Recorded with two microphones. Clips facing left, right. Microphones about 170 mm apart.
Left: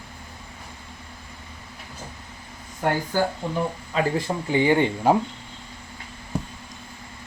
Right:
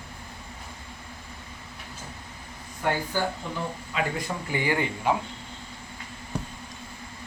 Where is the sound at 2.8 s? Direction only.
45° left (ahead or behind).